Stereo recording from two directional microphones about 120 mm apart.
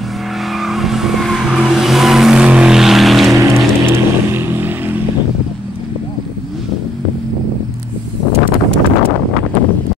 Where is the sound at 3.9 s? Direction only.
20° right (ahead or behind).